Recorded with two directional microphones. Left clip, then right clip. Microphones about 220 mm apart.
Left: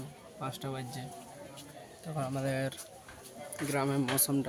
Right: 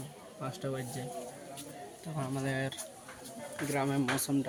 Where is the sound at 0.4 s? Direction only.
10° left (ahead or behind).